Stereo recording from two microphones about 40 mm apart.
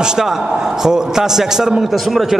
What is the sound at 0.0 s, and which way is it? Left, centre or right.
A man's voice, centre.